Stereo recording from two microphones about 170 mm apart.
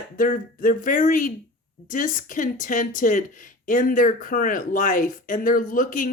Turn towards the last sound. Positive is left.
turn(degrees=50)  # may be behind; listen again after turning